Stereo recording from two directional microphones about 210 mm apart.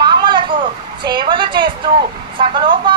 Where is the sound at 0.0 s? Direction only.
20° right (ahead or behind).